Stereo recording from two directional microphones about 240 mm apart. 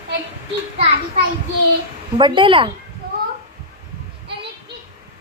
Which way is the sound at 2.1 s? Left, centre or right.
Centre.